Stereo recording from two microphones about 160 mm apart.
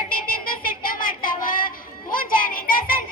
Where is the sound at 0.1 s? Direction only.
65° left (ahead or behind).